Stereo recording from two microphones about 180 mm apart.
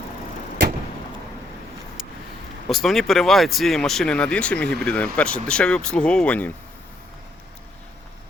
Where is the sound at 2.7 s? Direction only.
Centre (ahead or behind).